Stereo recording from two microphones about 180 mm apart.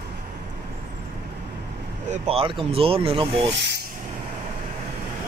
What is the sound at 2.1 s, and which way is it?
Speech, 35° right (ahead or behind).